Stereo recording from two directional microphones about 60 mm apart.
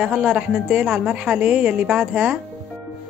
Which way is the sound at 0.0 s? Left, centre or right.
Centre.